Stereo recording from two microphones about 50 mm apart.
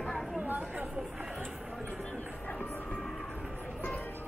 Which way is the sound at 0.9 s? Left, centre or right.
Centre.